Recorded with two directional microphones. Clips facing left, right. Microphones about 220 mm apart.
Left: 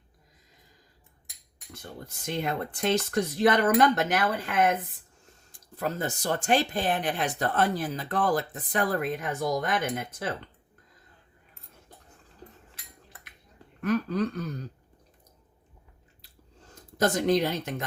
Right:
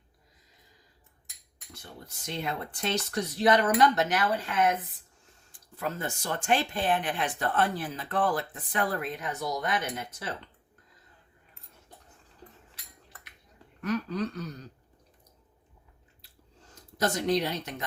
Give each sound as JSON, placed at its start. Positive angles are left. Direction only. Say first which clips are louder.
{"t": 1.7, "sound": "speech", "louder": "left 5 dB", "side_deg": 50}
{"t": 13.8, "sound": "speech", "louder": "left 4 dB", "side_deg": 50}
{"t": 17.0, "sound": "speech", "louder": "left 3 dB", "side_deg": 50}